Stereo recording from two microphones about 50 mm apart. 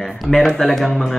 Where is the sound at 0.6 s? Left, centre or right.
Centre.